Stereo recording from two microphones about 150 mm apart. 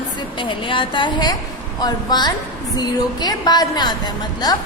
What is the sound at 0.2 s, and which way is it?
A woman's voice, 35° left (ahead or behind).